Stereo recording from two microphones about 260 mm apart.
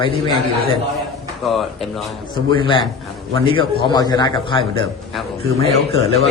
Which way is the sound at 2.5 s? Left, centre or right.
Centre.